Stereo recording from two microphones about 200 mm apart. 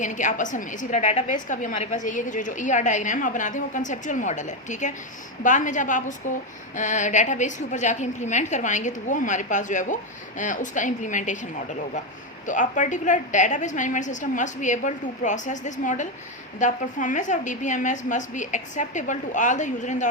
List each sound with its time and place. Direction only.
0.0 s a woman's voice: 40° left (ahead or behind)
12.5 s a woman's voice: 40° left (ahead or behind)